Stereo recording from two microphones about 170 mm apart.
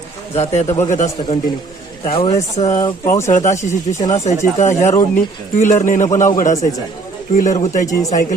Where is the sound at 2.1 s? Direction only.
35° left (ahead or behind).